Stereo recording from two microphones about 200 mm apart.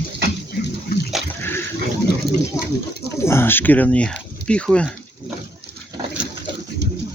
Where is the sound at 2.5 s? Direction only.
15° left (ahead or behind).